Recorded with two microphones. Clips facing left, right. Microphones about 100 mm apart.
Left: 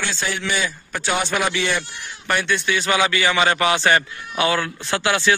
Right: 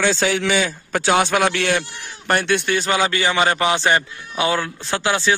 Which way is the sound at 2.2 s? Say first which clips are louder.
Right 3 dB; 55° right (ahead or behind).